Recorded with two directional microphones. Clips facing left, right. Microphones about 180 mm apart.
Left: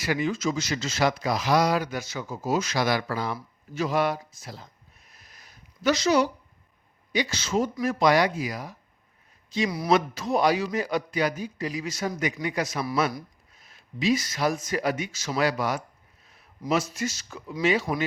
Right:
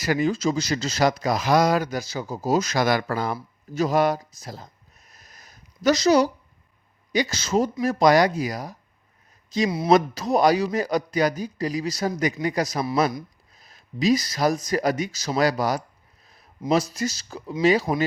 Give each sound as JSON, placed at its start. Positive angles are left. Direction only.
{"t": 0.0, "sound": "speech", "side_deg": -40}
{"t": 3.3, "sound": "a sound", "side_deg": -40}
{"t": 7.1, "sound": "speech", "side_deg": -40}
{"t": 9.6, "sound": "speech", "side_deg": -25}
{"t": 9.9, "sound": "speech", "side_deg": -40}
{"t": 16.2, "sound": "a sound", "side_deg": -35}
{"t": 16.6, "sound": "speech", "side_deg": -35}